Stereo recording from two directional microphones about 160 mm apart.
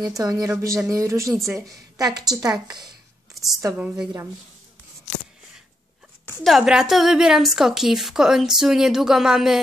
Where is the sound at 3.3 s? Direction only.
Centre (ahead or behind).